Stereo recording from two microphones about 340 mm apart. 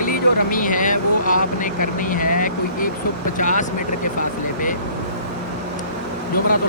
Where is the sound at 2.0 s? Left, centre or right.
Left.